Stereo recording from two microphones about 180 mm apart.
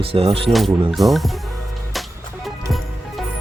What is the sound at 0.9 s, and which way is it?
Speech, centre (ahead or behind).